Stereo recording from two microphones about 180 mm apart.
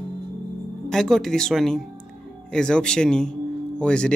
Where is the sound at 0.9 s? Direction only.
5° left (ahead or behind).